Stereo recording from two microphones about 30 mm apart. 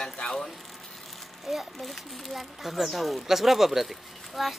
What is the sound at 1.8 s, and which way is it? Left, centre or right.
Speech, centre.